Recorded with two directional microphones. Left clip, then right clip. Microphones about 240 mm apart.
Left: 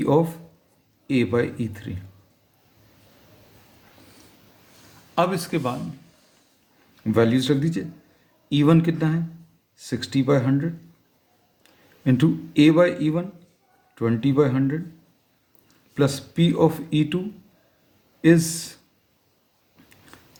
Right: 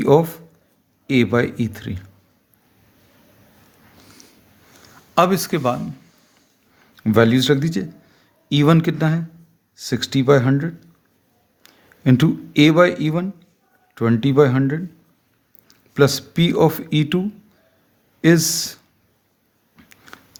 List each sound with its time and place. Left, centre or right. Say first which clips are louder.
0.0 s speech: right 5 dB; right
5.1 s speech: right 6 dB; right
6.9 s speech: right 5 dB; right